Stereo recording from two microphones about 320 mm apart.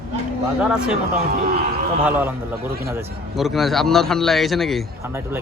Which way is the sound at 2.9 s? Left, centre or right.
Centre.